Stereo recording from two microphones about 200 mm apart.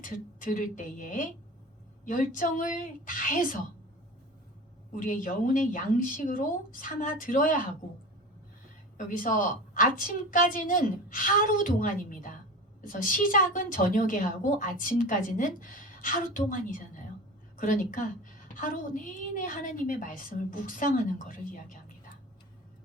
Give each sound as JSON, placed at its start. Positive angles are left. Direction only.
{"t": 0.0, "sound": "a woman's voice", "side_deg": 40}
{"t": 4.9, "sound": "speech", "side_deg": 40}
{"t": 9.0, "sound": "a woman's voice", "side_deg": 40}